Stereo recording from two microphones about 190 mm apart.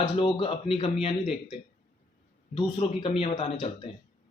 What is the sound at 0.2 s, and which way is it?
Speech, 25° left (ahead or behind).